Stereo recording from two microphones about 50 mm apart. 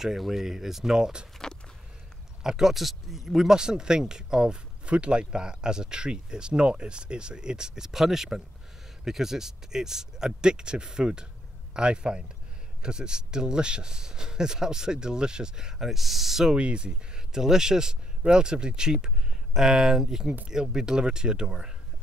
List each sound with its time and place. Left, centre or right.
0.0 s speech: centre
1.4 s walk: centre
2.4 s speech: centre
16.5 s speech: right